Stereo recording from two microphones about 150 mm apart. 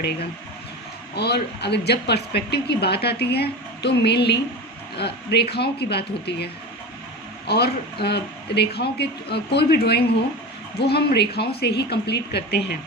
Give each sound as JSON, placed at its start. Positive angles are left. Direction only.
{"t": 1.1, "sound": "speech", "side_deg": 90}